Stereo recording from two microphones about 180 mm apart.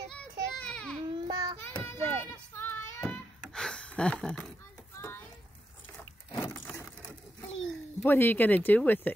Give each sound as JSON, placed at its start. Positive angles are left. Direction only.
{"t": 0.1, "sound": "child singing", "side_deg": 5}
{"t": 1.1, "sound": "child singing", "side_deg": -25}
{"t": 1.6, "sound": "child singing", "side_deg": 10}
{"t": 3.5, "sound": "a sound", "side_deg": 5}
{"t": 5.9, "sound": "a sound", "side_deg": 10}
{"t": 8.0, "sound": "speech", "side_deg": 10}